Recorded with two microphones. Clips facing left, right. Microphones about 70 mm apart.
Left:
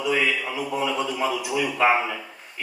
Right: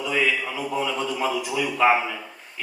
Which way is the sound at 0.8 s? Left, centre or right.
Centre.